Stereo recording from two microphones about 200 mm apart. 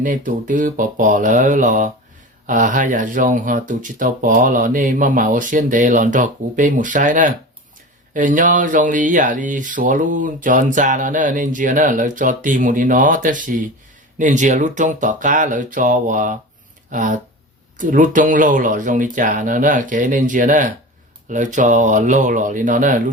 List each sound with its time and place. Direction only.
0.0 s speech: 40° right (ahead or behind)